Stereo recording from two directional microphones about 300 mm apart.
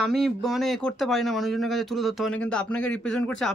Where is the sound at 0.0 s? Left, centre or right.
Centre.